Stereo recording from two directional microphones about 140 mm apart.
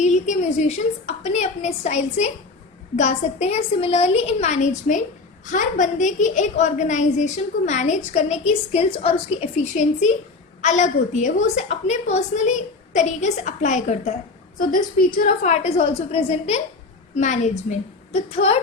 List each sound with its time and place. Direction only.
0.0 s a woman's voice: 60° left (ahead or behind)
10.6 s a woman's voice: 60° left (ahead or behind)
14.6 s a woman's voice: 80° left
15.4 s a woman's voice: 50° left (ahead or behind)
17.2 s a woman's voice: 60° left (ahead or behind)